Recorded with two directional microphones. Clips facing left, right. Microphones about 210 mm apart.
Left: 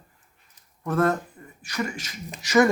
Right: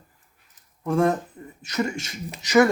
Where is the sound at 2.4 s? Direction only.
15° right (ahead or behind).